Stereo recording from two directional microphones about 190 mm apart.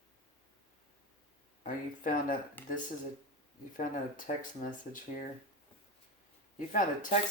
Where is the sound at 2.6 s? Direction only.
10° left (ahead or behind).